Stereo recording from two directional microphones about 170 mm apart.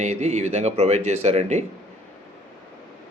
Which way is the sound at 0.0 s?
40° right (ahead or behind).